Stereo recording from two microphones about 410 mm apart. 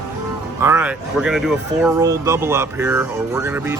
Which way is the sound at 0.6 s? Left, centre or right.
Centre.